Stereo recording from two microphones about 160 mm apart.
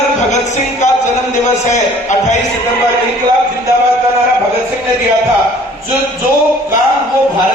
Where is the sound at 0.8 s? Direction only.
45° left (ahead or behind).